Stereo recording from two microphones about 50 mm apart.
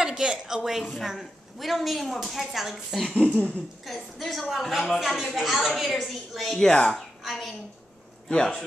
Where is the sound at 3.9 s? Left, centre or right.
Centre.